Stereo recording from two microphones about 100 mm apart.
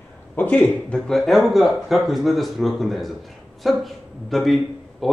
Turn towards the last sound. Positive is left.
turn(degrees=0)  # may be behind; listen again after turning